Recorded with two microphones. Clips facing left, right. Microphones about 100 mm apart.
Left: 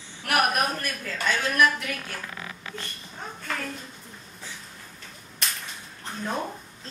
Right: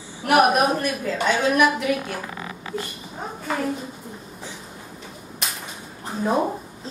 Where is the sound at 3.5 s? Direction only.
5° right (ahead or behind).